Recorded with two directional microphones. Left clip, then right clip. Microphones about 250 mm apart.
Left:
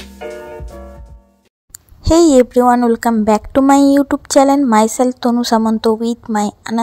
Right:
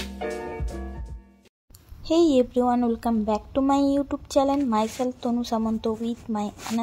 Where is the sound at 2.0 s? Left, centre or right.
Left.